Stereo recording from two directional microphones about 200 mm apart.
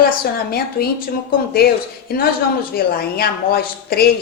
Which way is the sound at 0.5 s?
50° left (ahead or behind).